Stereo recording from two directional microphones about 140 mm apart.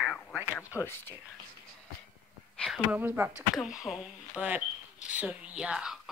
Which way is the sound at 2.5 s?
5° left (ahead or behind).